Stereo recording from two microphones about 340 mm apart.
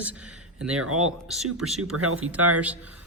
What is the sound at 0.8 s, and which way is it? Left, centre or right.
Speech, right.